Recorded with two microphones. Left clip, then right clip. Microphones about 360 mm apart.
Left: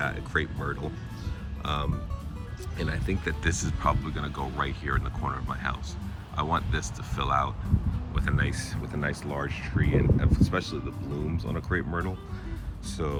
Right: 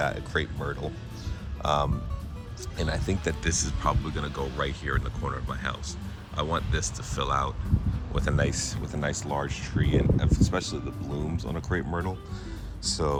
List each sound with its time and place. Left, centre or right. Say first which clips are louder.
0.0 s speech: right 1 dB; centre